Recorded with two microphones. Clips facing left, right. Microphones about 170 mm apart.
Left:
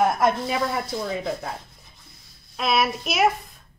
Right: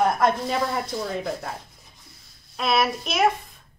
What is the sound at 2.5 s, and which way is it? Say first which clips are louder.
Speech: even; centre (ahead or behind).